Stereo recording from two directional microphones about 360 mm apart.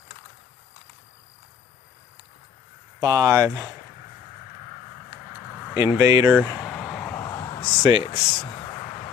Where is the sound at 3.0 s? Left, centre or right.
Centre.